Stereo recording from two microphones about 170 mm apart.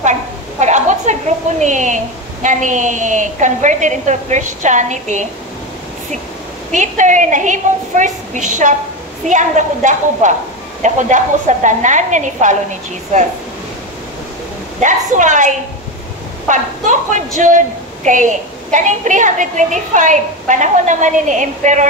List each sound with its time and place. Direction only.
0.6 s a sound: 45° right (ahead or behind)
1.6 s a woman's voice: 45° right (ahead or behind)
6.7 s a woman's voice: 45° right (ahead or behind)
14.8 s a woman's voice: 45° right (ahead or behind)